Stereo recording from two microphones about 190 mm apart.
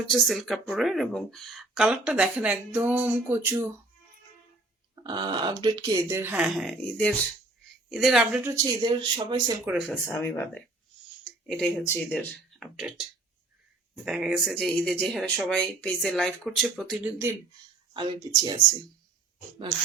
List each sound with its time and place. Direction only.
0.1 s speech: centre (ahead or behind)
5.0 s speech: 25° right (ahead or behind); by 8.5 s 5° right (ahead or behind)
8.5 s speech: 20° right (ahead or behind)
9.9 s speech: 10° left (ahead or behind)
11.2 s speech: 5° left (ahead or behind)
17.9 s speech: 20° right (ahead or behind)